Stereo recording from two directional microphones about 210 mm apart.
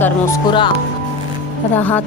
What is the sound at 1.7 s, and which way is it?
Speech, 10° left (ahead or behind).